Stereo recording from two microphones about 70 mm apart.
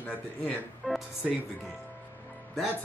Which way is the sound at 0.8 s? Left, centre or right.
Centre.